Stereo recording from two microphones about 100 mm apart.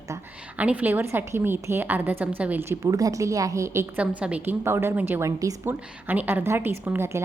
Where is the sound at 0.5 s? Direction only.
15° right (ahead or behind).